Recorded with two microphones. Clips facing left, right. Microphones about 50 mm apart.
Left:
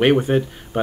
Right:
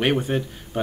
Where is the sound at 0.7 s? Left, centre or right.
Left.